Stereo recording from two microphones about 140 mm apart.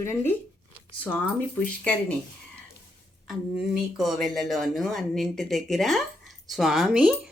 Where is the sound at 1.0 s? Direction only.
10° left (ahead or behind).